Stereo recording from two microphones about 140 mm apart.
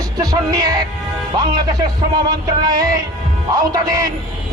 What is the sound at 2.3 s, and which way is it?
Speech, 25° right (ahead or behind).